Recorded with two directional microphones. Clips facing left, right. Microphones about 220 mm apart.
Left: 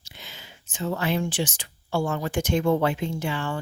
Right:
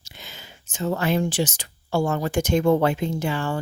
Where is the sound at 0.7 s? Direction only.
45° right (ahead or behind).